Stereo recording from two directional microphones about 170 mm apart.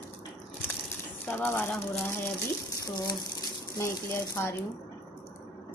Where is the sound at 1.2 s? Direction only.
10° left (ahead or behind).